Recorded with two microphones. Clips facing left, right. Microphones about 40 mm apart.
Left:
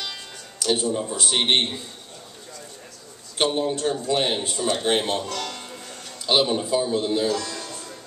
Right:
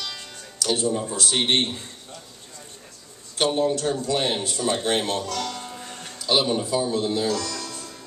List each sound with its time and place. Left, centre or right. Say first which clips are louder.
0.6 s a man's voice: left 1 dB; left
3.3 s a man's voice: right 1 dB; left
5.8 s music: right 2 dB; centre
6.2 s a man's voice: left 1 dB; left
7.2 s music: even; left